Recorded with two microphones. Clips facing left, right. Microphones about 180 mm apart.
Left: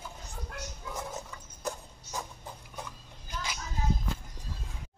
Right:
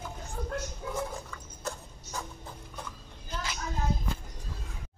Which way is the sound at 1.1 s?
15° left (ahead or behind).